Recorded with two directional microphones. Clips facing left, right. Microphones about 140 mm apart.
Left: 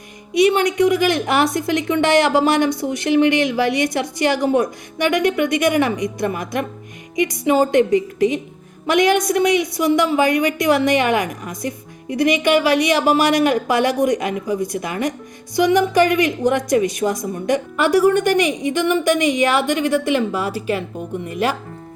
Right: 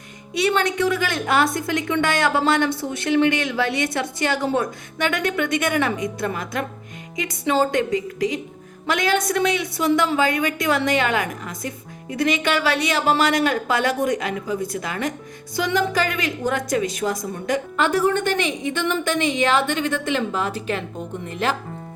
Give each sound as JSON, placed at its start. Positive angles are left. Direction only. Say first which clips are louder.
{"t": 0.3, "sound": "a woman's voice", "louder": "left 6 dB", "side_deg": 15}